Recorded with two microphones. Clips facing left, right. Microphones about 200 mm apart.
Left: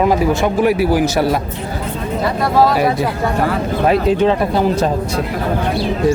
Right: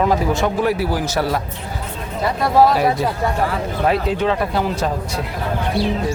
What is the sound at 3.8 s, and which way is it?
Speech, 20° left (ahead or behind).